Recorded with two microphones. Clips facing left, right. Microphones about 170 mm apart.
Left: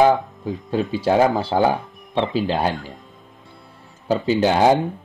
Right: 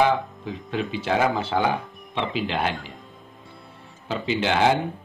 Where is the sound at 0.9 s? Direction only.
35° left (ahead or behind).